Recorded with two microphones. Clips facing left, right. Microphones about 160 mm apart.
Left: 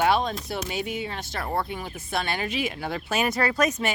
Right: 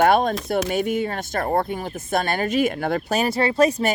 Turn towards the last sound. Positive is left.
turn(degrees=-25)  # may be behind; listen again after turning